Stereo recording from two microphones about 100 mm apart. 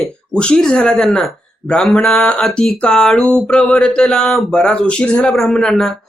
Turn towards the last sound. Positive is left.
turn(degrees=5)  # may be behind; listen again after turning